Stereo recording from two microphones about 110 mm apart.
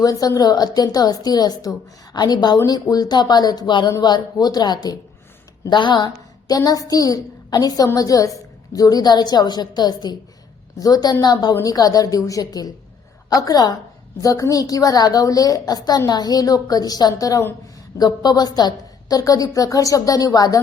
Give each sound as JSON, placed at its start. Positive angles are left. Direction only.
{"t": 0.0, "sound": "a woman's voice", "side_deg": 35}